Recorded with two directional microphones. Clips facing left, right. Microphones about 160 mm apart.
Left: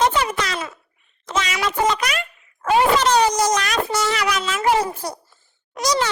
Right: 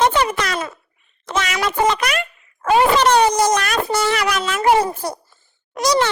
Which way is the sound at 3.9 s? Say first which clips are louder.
Right 4 dB; 55° right (ahead or behind).